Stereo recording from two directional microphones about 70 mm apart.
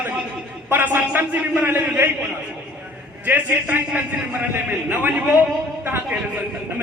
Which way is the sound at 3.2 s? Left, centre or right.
Right.